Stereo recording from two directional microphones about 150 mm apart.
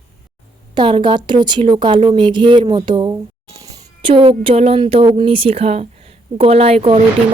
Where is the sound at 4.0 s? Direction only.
35° right (ahead or behind).